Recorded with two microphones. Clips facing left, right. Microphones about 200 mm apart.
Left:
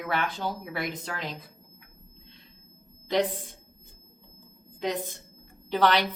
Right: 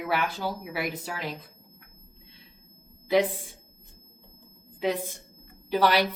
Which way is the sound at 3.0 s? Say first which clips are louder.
Right 3 dB; 10° right (ahead or behind).